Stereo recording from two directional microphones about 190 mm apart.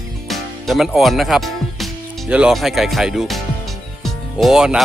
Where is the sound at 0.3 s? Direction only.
Centre (ahead or behind).